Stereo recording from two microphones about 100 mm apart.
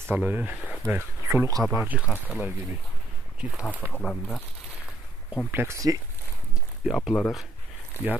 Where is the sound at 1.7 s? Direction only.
15° right (ahead or behind).